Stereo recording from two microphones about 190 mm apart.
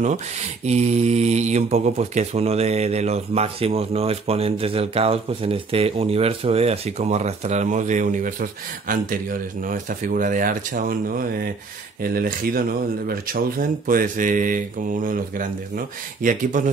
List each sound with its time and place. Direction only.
0.7 s speech: 35° right (ahead or behind)